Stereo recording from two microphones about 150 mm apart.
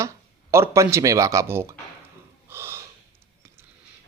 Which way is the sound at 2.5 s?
15° right (ahead or behind).